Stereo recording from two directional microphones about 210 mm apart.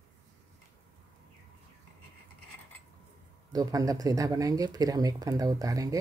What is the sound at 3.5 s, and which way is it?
Speech, 15° right (ahead or behind).